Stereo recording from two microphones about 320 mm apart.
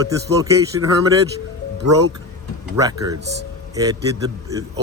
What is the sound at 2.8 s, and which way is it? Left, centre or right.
Speech, centre.